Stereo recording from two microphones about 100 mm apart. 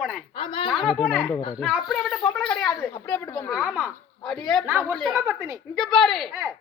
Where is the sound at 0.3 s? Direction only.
60° left (ahead or behind).